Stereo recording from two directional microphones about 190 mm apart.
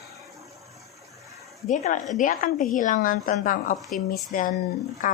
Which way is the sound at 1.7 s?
40° left (ahead or behind).